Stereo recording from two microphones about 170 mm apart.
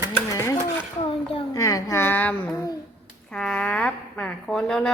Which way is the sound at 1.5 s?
20° left (ahead or behind).